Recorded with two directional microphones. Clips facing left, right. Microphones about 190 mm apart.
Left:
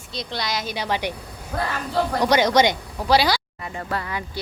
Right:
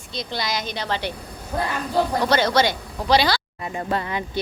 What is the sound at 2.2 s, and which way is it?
A child's voice, 15° left (ahead or behind).